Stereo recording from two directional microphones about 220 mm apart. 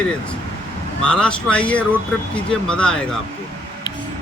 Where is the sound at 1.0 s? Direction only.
5° left (ahead or behind).